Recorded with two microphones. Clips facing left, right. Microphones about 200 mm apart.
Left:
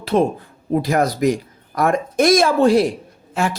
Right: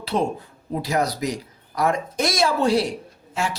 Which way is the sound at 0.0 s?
50° left (ahead or behind).